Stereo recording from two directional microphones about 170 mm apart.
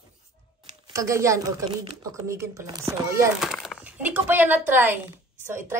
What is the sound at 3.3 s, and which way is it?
Speech, centre (ahead or behind).